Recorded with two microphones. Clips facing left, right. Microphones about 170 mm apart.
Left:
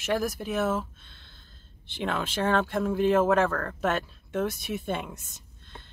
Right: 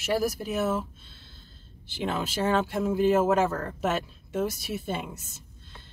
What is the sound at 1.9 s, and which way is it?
A woman's voice, 5° right (ahead or behind).